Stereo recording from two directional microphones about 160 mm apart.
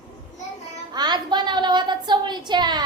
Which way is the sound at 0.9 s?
25° right (ahead or behind).